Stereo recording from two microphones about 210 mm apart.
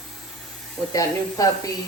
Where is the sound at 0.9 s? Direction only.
15° left (ahead or behind).